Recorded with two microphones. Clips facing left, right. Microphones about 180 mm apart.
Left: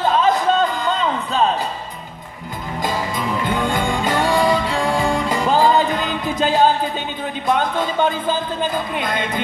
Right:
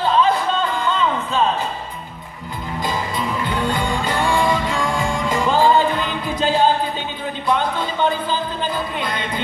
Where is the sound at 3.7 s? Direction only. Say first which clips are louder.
Left 2 dB; 45° left (ahead or behind).